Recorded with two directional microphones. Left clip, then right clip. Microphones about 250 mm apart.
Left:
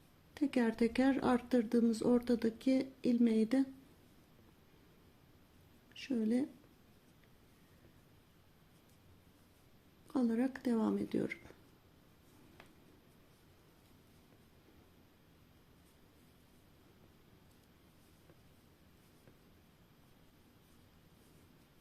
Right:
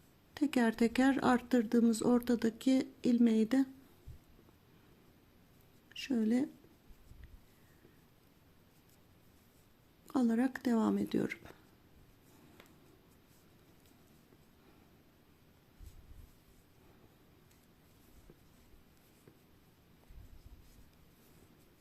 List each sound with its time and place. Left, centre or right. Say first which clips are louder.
0.3 s speech: right 2 dB; centre
5.9 s a woman's voice: right 2 dB; centre
10.1 s speech: right 2 dB; centre